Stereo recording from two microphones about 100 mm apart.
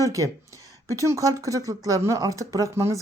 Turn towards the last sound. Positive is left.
turn(degrees=-30)  # may be behind; listen again after turning